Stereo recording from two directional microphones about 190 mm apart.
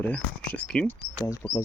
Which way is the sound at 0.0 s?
10° left (ahead or behind).